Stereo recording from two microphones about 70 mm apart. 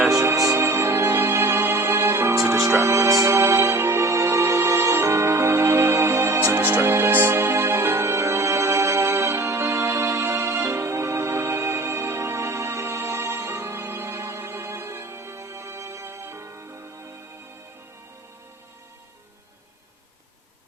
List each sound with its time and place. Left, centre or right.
0.1 s music: right